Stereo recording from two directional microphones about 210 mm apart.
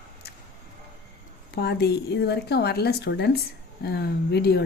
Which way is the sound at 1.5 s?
50° left (ahead or behind).